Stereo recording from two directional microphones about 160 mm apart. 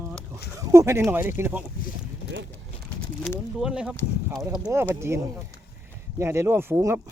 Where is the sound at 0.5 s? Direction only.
15° right (ahead or behind).